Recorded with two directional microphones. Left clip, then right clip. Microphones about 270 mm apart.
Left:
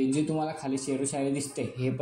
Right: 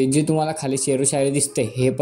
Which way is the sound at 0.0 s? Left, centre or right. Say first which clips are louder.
Right 9 dB; right.